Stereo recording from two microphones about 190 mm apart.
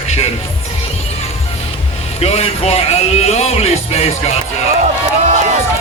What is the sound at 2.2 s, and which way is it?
Speech, 30° left (ahead or behind).